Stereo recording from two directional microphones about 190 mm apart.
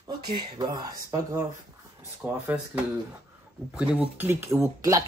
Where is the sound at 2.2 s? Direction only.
5° right (ahead or behind).